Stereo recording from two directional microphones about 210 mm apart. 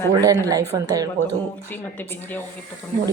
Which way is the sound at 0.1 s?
15° right (ahead or behind).